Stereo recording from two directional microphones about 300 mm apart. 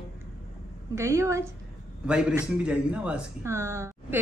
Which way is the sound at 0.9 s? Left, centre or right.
Centre.